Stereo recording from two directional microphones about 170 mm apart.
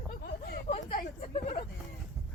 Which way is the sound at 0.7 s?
50° left (ahead or behind).